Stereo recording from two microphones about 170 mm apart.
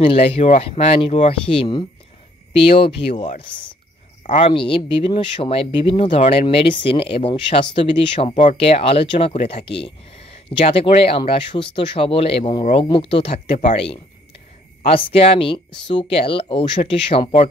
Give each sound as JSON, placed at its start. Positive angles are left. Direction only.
{"t": 0.0, "sound": "speech", "side_deg": 35}